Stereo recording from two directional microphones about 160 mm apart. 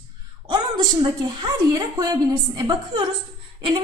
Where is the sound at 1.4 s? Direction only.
25° right (ahead or behind).